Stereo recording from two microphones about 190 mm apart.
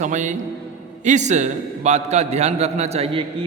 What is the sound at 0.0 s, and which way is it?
Mantra, 40° right (ahead or behind).